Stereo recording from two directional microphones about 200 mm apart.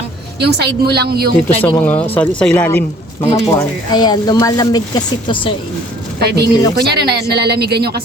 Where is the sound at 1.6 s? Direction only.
5° left (ahead or behind).